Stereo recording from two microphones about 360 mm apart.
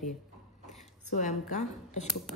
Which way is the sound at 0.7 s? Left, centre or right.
Centre.